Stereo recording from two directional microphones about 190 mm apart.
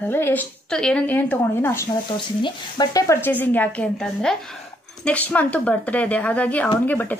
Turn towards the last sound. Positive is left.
turn(degrees=10)  # may be behind; listen again after turning